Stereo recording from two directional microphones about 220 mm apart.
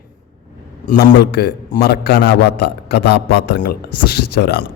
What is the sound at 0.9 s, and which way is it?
A man's voice, 45° left (ahead or behind).